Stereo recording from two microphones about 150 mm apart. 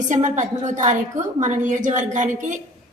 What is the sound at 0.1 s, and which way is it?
A woman's voice, 55° right (ahead or behind).